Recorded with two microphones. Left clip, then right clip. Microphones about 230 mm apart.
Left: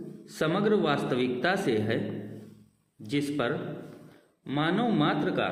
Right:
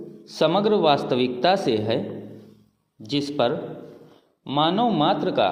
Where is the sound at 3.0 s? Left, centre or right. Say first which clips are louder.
Right 7 dB; centre.